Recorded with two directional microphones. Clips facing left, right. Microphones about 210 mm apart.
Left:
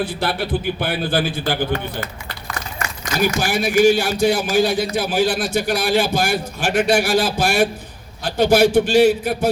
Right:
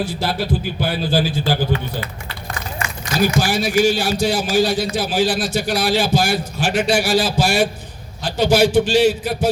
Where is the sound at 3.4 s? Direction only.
55° left (ahead or behind).